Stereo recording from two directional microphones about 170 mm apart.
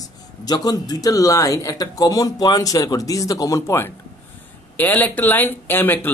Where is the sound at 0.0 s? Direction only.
20° left (ahead or behind).